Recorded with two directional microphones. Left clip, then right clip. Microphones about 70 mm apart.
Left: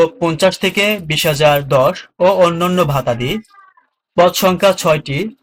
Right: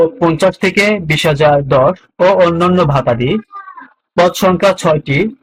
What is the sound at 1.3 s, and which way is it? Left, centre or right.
Speech, centre.